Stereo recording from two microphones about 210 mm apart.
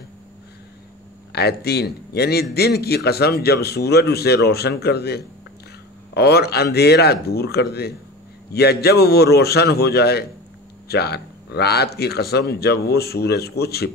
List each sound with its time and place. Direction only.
1.3 s speech: 50° left (ahead or behind)